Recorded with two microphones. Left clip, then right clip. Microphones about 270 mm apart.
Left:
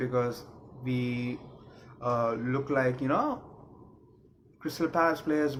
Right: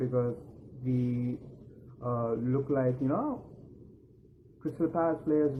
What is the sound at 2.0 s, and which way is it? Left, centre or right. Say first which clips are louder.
Speech: left 4 dB; left.